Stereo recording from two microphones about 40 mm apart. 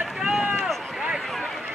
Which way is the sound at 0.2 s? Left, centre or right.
Centre.